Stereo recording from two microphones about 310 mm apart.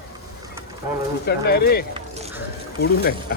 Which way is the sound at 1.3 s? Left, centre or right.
Left.